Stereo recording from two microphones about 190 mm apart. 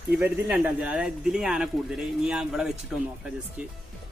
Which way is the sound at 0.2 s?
5° right (ahead or behind).